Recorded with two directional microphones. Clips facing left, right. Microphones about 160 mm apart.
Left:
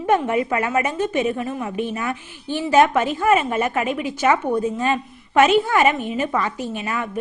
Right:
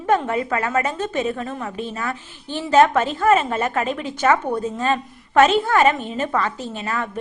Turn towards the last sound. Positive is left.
turn(degrees=15)  # may be behind; listen again after turning